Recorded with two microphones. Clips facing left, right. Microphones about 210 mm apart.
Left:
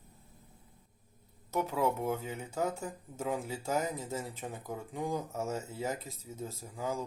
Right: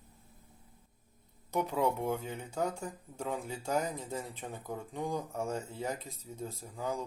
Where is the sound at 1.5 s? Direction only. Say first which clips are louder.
Even; 5° left (ahead or behind).